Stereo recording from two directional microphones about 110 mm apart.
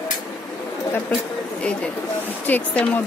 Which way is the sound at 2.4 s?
15° left (ahead or behind).